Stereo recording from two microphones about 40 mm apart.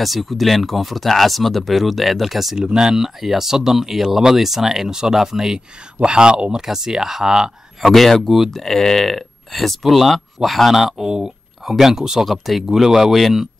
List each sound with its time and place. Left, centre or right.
0.0 s speech: centre
2.5 s speech: centre
6.5 s speech: centre
7.8 s speech: centre
11.1 s a sound: centre
11.7 s speech: centre